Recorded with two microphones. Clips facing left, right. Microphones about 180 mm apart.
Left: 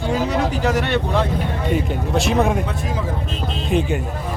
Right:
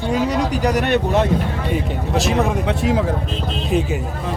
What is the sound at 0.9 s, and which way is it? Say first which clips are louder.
Speech: right 3 dB; 20° right (ahead or behind).